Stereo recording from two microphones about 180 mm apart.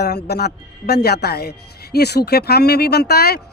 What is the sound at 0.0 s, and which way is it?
A man's voice, 65° left (ahead or behind).